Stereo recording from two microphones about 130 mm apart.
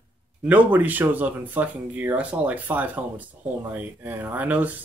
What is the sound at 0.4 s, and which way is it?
Speech, 10° right (ahead or behind).